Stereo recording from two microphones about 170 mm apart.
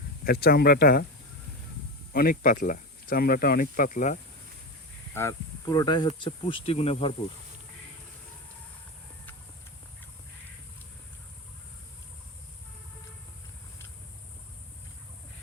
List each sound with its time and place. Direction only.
0.3 s speech: 65° left (ahead or behind)
2.1 s speech: 55° left (ahead or behind)
5.1 s speech: 15° left (ahead or behind); by 7.1 s 35° left (ahead or behind)